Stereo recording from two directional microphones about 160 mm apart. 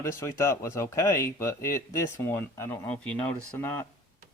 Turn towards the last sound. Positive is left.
turn(degrees=10)  # may be behind; listen again after turning